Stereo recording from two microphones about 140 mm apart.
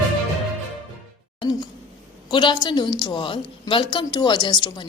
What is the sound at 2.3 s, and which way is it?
A woman's voice, 35° left (ahead or behind).